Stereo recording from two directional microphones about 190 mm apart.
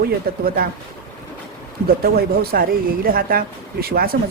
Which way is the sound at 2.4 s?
50° right (ahead or behind).